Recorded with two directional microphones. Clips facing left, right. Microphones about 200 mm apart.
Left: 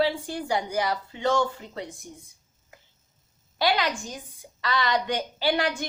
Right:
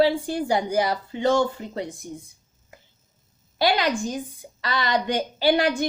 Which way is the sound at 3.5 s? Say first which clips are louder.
Right 3 dB; 40° right (ahead or behind).